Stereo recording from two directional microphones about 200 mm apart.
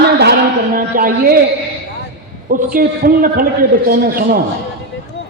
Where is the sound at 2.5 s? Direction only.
45° right (ahead or behind).